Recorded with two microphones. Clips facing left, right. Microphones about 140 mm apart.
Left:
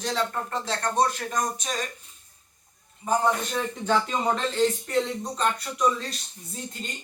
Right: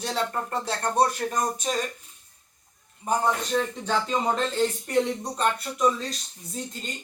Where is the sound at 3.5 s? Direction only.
5° left (ahead or behind).